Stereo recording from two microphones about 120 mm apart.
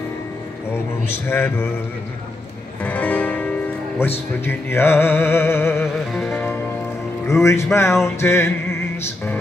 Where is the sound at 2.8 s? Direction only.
15° left (ahead or behind).